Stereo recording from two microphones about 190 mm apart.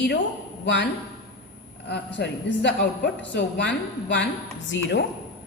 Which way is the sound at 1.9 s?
65° left (ahead or behind).